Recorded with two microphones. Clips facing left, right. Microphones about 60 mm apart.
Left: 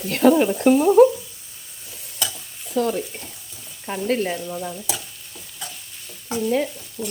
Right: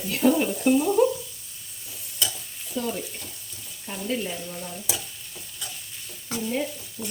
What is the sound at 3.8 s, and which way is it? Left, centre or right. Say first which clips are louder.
Sizzle: left 7 dB; left.